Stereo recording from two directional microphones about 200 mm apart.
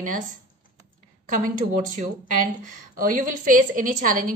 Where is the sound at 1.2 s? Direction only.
45° right (ahead or behind).